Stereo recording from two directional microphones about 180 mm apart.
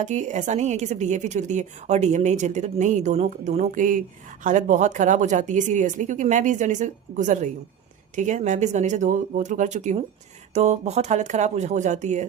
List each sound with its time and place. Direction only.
0.0 s a woman's voice: 40° right (ahead or behind)